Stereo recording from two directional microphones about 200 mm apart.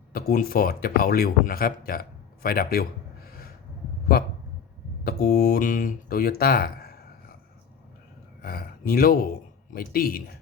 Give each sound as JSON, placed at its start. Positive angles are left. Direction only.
{"t": 0.1, "sound": "speech", "side_deg": 50}
{"t": 4.1, "sound": "speech", "side_deg": 50}
{"t": 8.4, "sound": "a sound", "side_deg": 50}
{"t": 9.7, "sound": "speech", "side_deg": 45}